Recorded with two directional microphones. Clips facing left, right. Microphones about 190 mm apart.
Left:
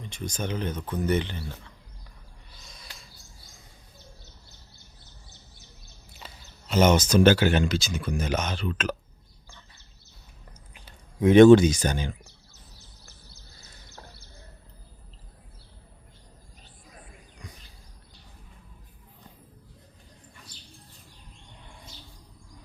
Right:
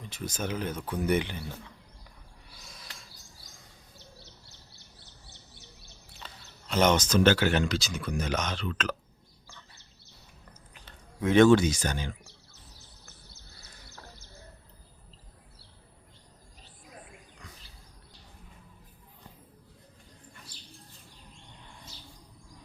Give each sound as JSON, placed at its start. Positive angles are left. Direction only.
{"t": 0.0, "sound": "speech", "side_deg": -5}
{"t": 2.5, "sound": "a sound", "side_deg": -5}
{"t": 6.1, "sound": "speech", "side_deg": 5}
{"t": 10.8, "sound": "speech", "side_deg": 15}